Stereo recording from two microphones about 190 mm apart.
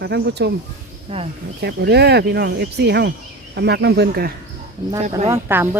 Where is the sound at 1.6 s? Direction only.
60° right (ahead or behind).